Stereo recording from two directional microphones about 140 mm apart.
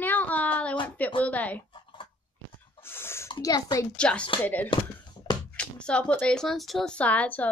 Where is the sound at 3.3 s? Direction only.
30° left (ahead or behind).